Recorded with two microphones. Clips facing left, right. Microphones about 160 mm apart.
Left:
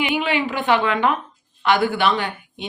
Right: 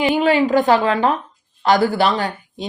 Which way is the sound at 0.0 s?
40° right (ahead or behind).